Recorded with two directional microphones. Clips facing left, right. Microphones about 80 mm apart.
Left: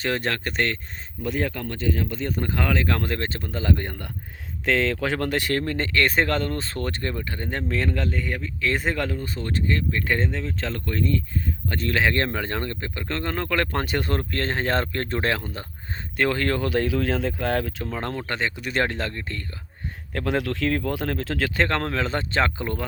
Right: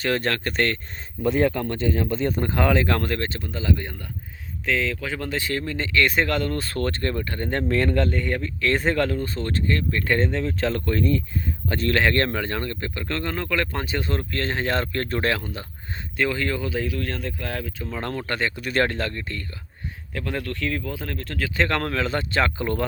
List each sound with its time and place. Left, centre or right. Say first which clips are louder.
0.0 s speech: right 2 dB; centre
1.2 s speech: right 6 dB; right
3.0 s speech: right 1 dB; left
3.2 s speech: even; left
4.6 s speech: left 3 dB; left; by 11.2 s centre
11.9 s speech: right 2 dB; centre; by 14.2 s left
14.2 s speech: even; left
16.1 s speech: left 1 dB; left
16.6 s speech: left 4 dB; left
17.8 s speech: even; left
20.1 s speech: left 4 dB; left
21.7 s speech: right 1 dB; left
22.6 s speech: right 4 dB; centre